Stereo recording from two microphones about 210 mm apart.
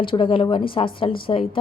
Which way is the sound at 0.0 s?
25° left (ahead or behind).